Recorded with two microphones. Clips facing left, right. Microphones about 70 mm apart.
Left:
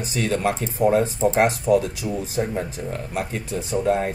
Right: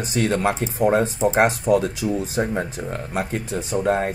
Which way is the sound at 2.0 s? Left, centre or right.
Centre.